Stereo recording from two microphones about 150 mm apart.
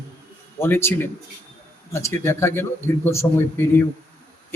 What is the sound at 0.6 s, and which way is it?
A man's voice, 15° left (ahead or behind).